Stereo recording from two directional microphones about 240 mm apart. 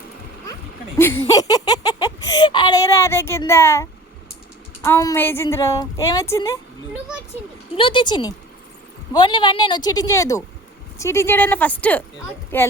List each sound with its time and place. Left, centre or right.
1.3 s a child's voice: centre
7.8 s a woman's voice: left